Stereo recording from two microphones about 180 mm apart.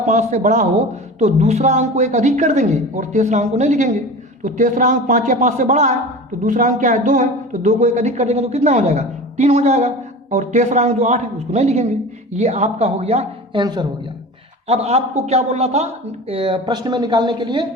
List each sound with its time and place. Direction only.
0.0 s a man's voice: 40° right (ahead or behind)
14.7 s a man's voice: 35° right (ahead or behind)